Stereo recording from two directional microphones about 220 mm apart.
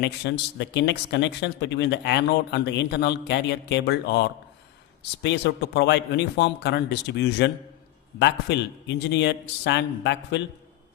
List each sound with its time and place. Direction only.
0.0 s speech: 50° left (ahead or behind)